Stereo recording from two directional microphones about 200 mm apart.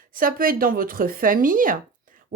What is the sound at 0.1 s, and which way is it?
Speech, 45° right (ahead or behind).